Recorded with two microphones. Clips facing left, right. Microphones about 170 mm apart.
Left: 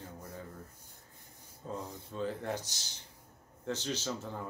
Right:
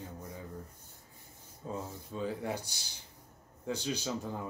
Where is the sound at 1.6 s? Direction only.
10° right (ahead or behind).